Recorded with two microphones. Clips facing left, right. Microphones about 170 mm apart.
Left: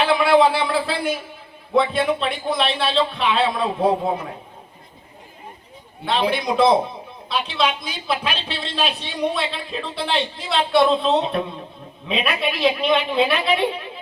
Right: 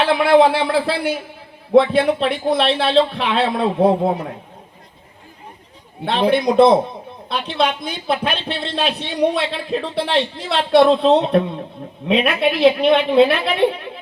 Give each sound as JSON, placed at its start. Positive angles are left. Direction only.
{"t": 0.0, "sound": "a woman's voice", "side_deg": -60}
{"t": 6.1, "sound": "a woman's voice", "side_deg": -55}